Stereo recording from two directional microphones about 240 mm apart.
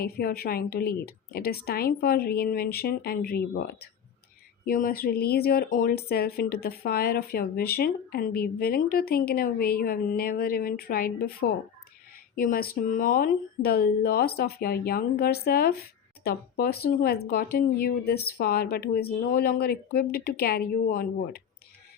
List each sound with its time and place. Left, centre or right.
0.0 s speech: left